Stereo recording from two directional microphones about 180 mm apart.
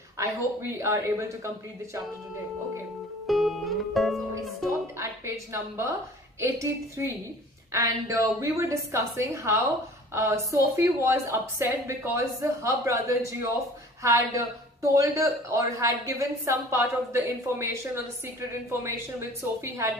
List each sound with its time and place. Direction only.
0.2 s speech: 15° right (ahead or behind)
3.3 s music: centre (ahead or behind)
4.9 s a sound: 15° right (ahead or behind)
6.4 s speech: 15° right (ahead or behind)